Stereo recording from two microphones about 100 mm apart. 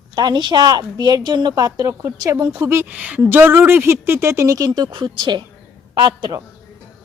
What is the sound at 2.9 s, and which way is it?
A woman's voice, 15° right (ahead or behind).